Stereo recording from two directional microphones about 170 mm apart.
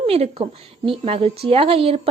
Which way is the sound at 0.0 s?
35° right (ahead or behind).